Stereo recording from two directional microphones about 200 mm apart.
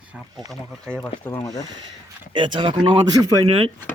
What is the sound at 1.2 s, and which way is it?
Speech, 15° left (ahead or behind).